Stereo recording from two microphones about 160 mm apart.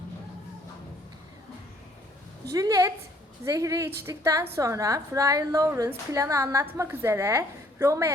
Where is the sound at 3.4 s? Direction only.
20° right (ahead or behind).